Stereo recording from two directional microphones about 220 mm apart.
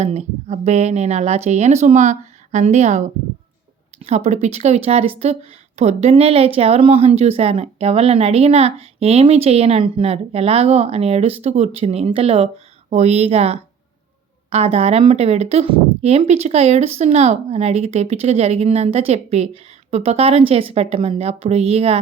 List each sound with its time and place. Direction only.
0.0 s speech: 30° right (ahead or behind)